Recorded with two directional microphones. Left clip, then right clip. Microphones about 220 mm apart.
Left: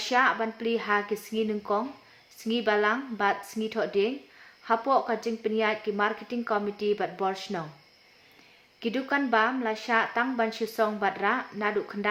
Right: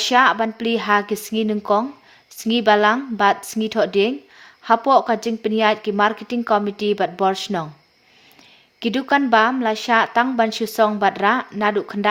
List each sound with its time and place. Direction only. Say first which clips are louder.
0.0 s speech: right 9 dB; 40° right (ahead or behind)
8.8 s speech: right 9 dB; 40° right (ahead or behind)